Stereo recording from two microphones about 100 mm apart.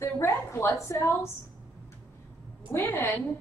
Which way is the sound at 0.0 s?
25° left (ahead or behind).